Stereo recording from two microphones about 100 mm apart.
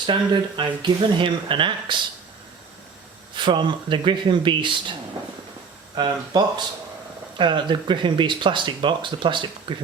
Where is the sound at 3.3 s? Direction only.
50° right (ahead or behind).